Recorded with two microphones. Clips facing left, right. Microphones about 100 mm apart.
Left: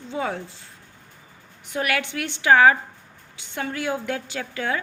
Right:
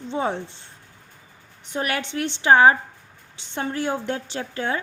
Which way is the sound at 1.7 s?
25° right (ahead or behind).